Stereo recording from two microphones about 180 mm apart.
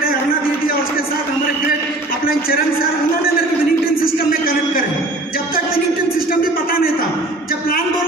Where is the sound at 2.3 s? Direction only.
55° left (ahead or behind).